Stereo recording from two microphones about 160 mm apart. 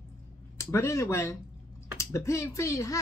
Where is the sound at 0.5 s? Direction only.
15° left (ahead or behind).